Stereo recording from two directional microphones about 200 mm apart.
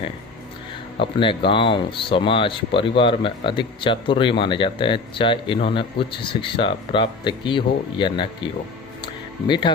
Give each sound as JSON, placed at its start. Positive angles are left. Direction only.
{"t": 1.0, "sound": "speech", "side_deg": 25}
{"t": 9.5, "sound": "speech", "side_deg": 25}